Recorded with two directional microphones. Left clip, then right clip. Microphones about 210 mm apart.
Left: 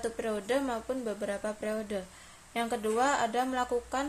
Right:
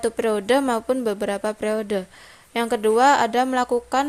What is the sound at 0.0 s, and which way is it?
A woman's voice, 45° right (ahead or behind).